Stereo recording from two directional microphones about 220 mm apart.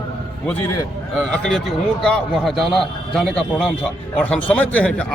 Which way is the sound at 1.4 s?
5° left (ahead or behind).